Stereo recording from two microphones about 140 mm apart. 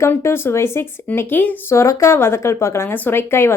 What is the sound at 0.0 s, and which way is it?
Speech, 20° left (ahead or behind).